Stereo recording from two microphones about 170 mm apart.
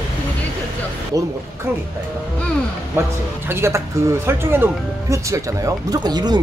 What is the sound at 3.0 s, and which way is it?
Speech, 15° right (ahead or behind).